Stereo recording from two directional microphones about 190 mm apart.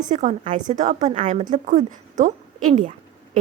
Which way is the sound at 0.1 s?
40° right (ahead or behind).